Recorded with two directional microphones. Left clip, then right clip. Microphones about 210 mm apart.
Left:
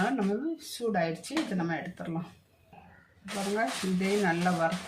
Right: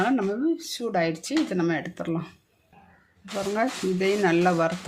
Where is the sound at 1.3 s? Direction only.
60° right (ahead or behind).